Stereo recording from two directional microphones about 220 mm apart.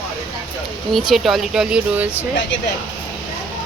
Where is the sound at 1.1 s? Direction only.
Centre (ahead or behind).